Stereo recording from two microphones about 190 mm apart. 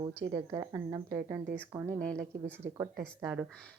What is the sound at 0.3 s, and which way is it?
Speech, 20° right (ahead or behind).